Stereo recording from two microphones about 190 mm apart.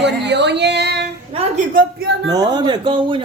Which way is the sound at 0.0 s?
65° right (ahead or behind).